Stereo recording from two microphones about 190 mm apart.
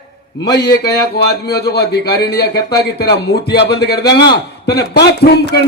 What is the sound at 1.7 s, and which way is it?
A man's voice, 60° left (ahead or behind).